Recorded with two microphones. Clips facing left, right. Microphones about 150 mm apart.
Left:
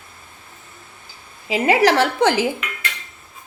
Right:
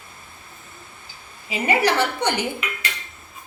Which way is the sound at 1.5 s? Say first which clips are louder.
Left 5 dB; 90° left.